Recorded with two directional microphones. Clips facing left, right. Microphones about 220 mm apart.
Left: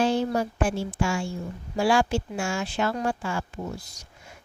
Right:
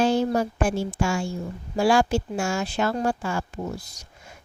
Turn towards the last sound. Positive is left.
turn(degrees=-40)  # may be behind; listen again after turning